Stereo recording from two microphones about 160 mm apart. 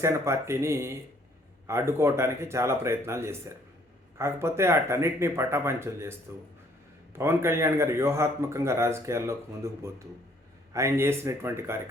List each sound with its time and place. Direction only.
0.0 s a man's voice: 15° right (ahead or behind)